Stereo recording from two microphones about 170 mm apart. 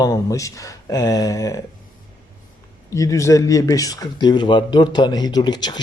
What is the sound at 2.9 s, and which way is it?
Speech, 20° left (ahead or behind).